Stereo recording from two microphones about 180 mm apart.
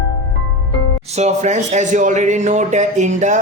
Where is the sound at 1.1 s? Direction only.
40° right (ahead or behind).